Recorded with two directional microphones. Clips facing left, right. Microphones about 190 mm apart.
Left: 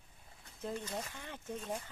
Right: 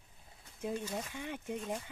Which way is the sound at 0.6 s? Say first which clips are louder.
Right 3 dB; 15° right (ahead or behind).